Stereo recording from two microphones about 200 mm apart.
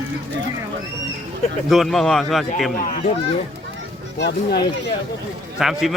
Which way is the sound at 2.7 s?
45° left (ahead or behind).